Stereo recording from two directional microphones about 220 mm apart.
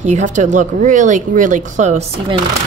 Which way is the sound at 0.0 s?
35° right (ahead or behind).